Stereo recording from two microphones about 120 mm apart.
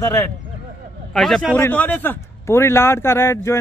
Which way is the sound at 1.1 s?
5° left (ahead or behind).